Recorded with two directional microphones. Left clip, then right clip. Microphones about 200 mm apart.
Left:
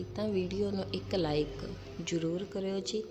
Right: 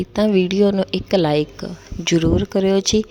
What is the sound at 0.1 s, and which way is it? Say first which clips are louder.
A woman's voice: right 17 dB; 55° right (ahead or behind).